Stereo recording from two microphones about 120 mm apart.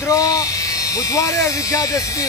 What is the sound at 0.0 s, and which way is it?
Speech, 30° left (ahead or behind).